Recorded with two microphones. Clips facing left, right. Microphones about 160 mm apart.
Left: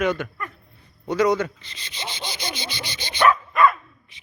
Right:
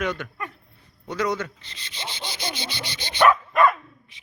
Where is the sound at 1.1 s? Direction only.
10° left (ahead or behind).